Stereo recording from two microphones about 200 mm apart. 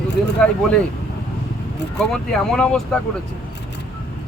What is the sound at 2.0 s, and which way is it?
Speech, 5° left (ahead or behind).